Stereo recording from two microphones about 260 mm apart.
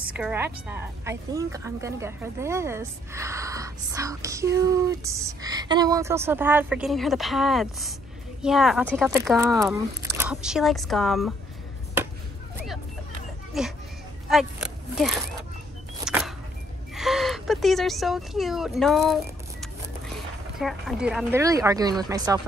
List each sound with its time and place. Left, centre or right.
0.0 s a woman's voice: centre
9.6 s speech: centre
13.5 s speech: centre
14.3 s a sound: centre
16.9 s speech: centre
20.5 s a woman's voice: centre